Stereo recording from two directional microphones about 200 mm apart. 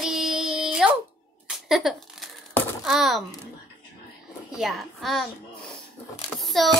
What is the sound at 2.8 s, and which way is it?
Speech, centre (ahead or behind).